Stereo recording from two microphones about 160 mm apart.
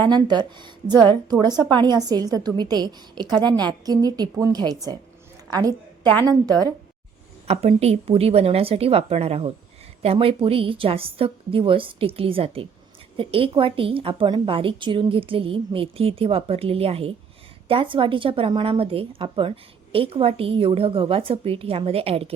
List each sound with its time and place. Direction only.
0.1 s a woman's voice: 25° right (ahead or behind)
5.5 s a sound: 25° right (ahead or behind)
6.2 s a woman's voice: 25° right (ahead or behind)
7.4 s a woman's voice: 40° right (ahead or behind)